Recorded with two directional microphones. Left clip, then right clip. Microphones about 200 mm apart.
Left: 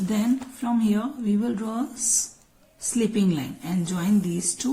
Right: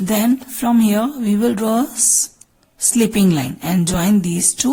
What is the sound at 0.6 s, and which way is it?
Speech, 50° right (ahead or behind).